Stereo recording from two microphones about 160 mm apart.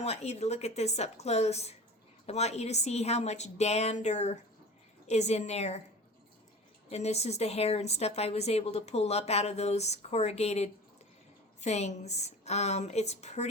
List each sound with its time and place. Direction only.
0.0 s a woman's voice: 40° left (ahead or behind)
6.9 s a woman's voice: 45° left (ahead or behind)